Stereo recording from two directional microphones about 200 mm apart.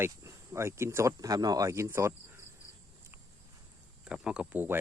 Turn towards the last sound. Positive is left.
turn(degrees=-10)  # may be behind; listen again after turning